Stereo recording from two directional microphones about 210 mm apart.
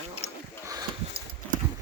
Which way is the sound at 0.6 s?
15° right (ahead or behind).